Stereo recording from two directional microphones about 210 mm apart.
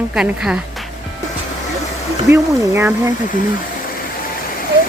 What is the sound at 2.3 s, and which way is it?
Speech, 10° right (ahead or behind).